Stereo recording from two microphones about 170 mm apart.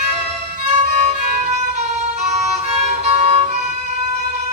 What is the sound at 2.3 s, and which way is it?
Music, 40° right (ahead or behind).